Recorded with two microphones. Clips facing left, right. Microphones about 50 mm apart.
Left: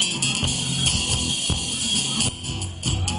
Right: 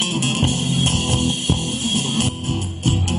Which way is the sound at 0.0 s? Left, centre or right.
Right.